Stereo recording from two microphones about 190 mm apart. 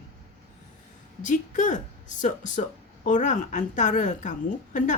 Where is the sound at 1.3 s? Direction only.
40° left (ahead or behind).